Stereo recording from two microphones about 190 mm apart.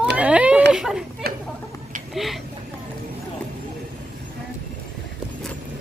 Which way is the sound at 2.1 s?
Centre (ahead or behind).